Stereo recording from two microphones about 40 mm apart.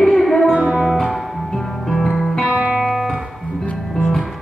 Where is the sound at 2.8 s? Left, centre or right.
Centre.